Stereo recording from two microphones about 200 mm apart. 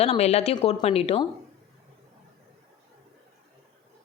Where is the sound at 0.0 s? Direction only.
30° left (ahead or behind).